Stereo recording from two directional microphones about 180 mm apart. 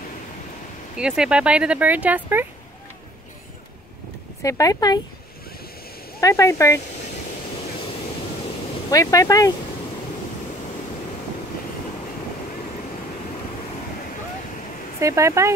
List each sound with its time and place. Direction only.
0.9 s speech: 5° right (ahead or behind)
4.4 s speech: 20° left (ahead or behind)
6.2 s speech: 15° left (ahead or behind)
8.9 s speech: 20° left (ahead or behind)
15.0 s speech: 15° right (ahead or behind)